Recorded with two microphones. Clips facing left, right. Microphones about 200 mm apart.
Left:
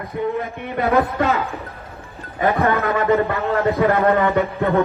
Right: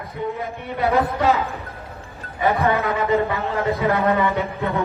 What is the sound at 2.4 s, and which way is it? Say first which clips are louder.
A man's voice: left 1 dB; 55° left (ahead or behind).